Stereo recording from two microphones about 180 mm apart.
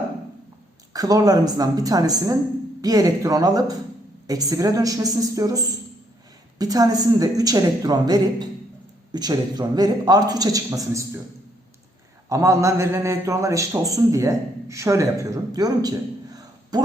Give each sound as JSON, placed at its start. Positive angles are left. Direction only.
{"t": 0.9, "sound": "a man's voice", "side_deg": -20}
{"t": 12.3, "sound": "a man's voice", "side_deg": -15}